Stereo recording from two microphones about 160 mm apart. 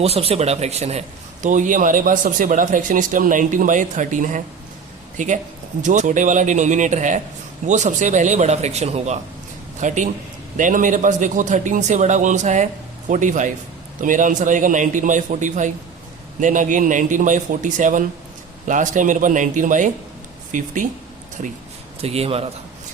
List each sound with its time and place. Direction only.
0.0 s a man's voice: 40° right (ahead or behind); by 20.8 s 55° right (ahead or behind)
22.0 s a man's voice: 40° right (ahead or behind)